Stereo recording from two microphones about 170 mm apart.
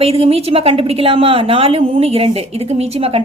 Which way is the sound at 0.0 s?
35° right (ahead or behind).